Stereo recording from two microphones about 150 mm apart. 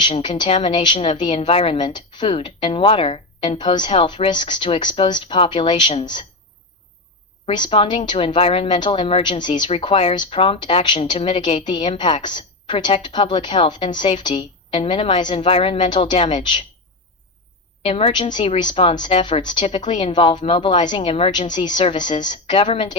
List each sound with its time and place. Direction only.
0.2 s a woman's voice: 30° left (ahead or behind)
7.4 s a woman's voice: 35° left (ahead or behind)
17.8 s a woman's voice: 35° left (ahead or behind)